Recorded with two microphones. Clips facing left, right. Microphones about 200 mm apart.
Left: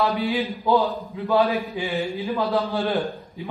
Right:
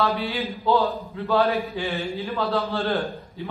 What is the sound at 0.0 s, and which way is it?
A man's voice, 15° left (ahead or behind).